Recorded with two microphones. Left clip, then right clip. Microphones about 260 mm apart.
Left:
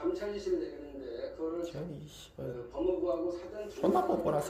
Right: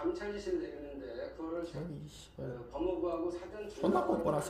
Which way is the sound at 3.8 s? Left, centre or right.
Centre.